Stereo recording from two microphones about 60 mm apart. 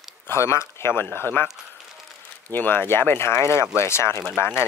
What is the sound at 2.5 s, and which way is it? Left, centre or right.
Speech, left.